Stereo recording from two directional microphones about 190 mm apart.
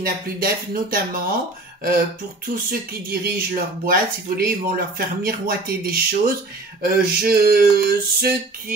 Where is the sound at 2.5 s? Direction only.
55° right (ahead or behind).